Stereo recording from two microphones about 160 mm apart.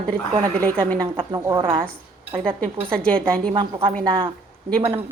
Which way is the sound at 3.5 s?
30° right (ahead or behind).